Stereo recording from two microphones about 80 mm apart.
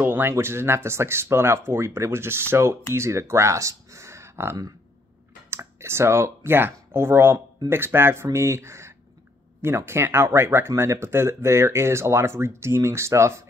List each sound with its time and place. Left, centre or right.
0.0 s speech: right